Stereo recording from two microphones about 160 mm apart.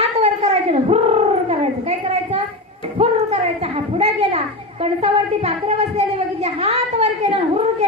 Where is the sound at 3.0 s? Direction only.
40° right (ahead or behind).